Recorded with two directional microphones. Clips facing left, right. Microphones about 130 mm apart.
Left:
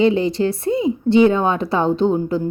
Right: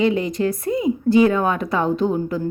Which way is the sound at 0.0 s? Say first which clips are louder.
Left 3 dB; 30° left (ahead or behind).